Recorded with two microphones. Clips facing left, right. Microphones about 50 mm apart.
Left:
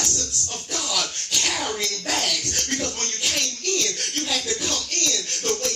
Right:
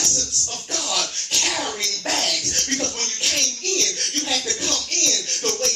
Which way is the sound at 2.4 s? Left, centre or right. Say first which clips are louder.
Right 1 dB; centre.